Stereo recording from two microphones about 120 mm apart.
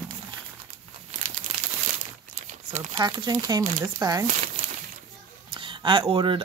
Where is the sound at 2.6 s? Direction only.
75° right (ahead or behind).